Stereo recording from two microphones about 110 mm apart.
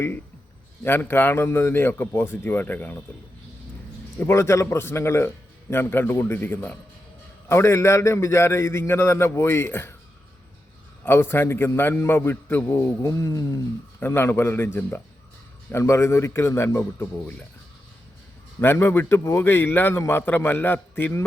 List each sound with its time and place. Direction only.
0.9 s a man's voice: 20° left (ahead or behind)
4.2 s a man's voice: 25° left (ahead or behind)
11.0 s a man's voice: 20° left (ahead or behind)
14.0 s a man's voice: 20° left (ahead or behind)
18.6 s a man's voice: 20° left (ahead or behind)